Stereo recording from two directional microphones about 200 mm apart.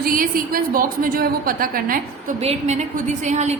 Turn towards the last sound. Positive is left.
turn(degrees=-35)  # may be behind; listen again after turning